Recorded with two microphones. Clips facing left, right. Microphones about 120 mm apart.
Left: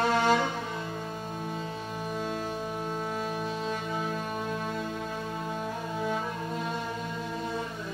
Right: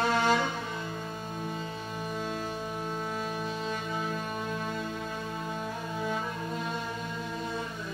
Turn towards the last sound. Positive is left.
turn(degrees=35)  # may be behind; listen again after turning